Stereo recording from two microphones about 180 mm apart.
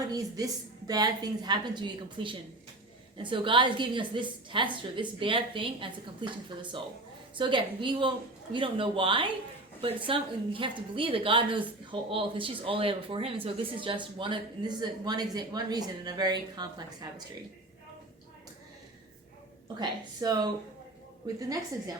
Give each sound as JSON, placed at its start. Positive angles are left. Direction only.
{"t": 0.1, "sound": "speech", "side_deg": -20}
{"t": 19.6, "sound": "speech", "side_deg": -25}